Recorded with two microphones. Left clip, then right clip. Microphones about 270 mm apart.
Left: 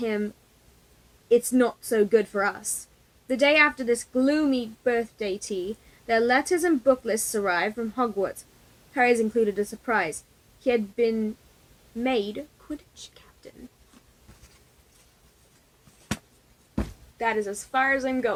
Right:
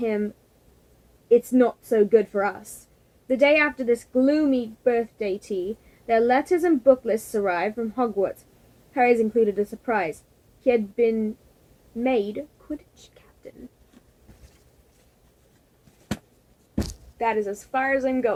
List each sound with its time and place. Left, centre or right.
0.0 s a woman's voice: left
11.9 s whispering: left
16.7 s speech: left